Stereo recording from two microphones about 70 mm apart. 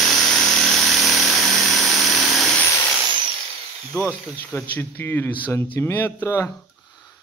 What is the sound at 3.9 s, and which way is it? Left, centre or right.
Tools, right.